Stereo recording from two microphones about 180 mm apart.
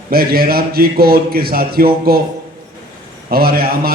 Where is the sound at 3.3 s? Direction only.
55° right (ahead or behind).